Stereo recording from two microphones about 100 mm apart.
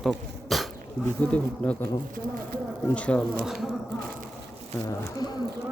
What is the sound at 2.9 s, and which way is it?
Speech, 10° left (ahead or behind).